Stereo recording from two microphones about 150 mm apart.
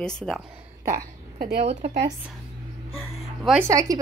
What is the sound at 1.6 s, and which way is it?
Speech, 45° right (ahead or behind).